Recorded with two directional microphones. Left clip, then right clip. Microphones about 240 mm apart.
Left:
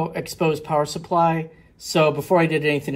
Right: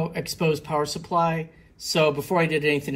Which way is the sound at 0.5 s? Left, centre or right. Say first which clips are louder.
Left 3 dB; left.